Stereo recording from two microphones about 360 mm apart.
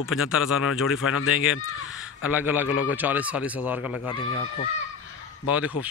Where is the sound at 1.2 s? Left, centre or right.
Left.